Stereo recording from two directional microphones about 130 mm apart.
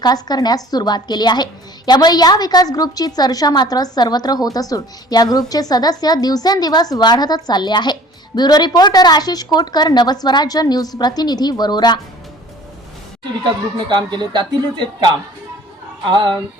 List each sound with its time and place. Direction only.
0.0 s a woman's voice: 30° left (ahead or behind)
13.7 s speech: 35° right (ahead or behind)